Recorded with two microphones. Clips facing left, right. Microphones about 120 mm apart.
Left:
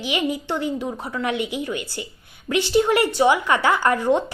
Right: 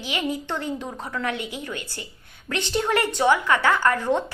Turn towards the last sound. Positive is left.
turn(degrees=15)  # may be behind; listen again after turning